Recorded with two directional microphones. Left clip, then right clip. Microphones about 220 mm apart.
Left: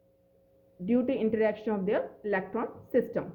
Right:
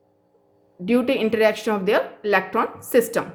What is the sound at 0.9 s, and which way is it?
A woman's voice, 20° right (ahead or behind).